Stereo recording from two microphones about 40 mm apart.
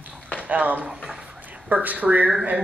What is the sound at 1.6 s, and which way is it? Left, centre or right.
Speech, right.